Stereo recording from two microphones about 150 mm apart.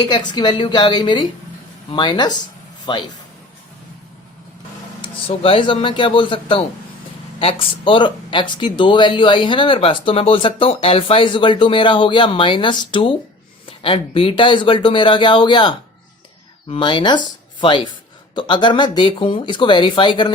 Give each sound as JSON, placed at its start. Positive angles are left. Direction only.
{"t": 0.0, "sound": "speech", "side_deg": 30}
{"t": 5.0, "sound": "speech", "side_deg": 35}